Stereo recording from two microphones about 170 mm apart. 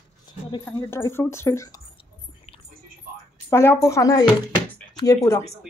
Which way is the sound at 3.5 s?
15° left (ahead or behind).